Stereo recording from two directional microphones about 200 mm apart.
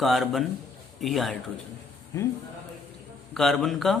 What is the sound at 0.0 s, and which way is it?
A man's voice, centre (ahead or behind).